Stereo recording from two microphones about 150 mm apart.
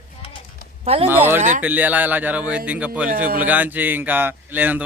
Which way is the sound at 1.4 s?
60° right (ahead or behind).